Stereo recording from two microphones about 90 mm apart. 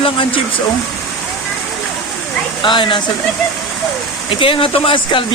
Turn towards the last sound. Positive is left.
turn(degrees=85)